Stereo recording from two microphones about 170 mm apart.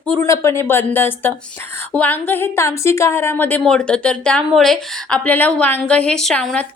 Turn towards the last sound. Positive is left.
turn(degrees=5)  # may be behind; listen again after turning